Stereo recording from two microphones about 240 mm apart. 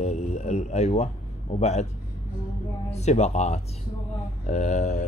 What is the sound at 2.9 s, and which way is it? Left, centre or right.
Speech, left.